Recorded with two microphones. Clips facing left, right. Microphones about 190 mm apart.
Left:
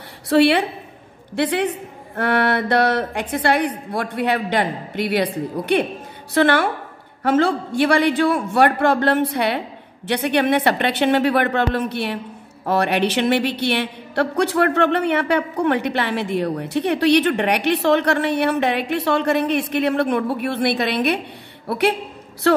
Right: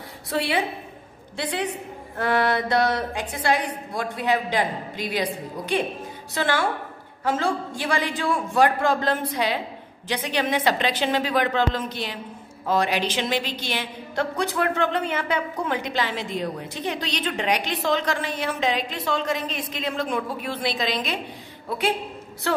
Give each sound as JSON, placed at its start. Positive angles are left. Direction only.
{"t": 0.3, "sound": "a man's voice", "side_deg": 70}
{"t": 1.3, "sound": "a woman's voice", "side_deg": 60}
{"t": 6.3, "sound": "a woman's voice", "side_deg": 60}